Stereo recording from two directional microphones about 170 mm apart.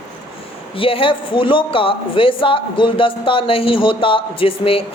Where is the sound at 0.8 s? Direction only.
30° left (ahead or behind).